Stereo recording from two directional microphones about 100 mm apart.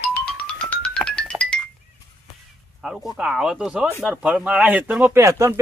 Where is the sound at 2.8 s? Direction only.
5° right (ahead or behind).